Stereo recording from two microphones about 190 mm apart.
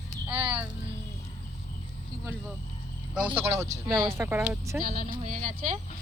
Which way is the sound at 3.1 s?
10° right (ahead or behind).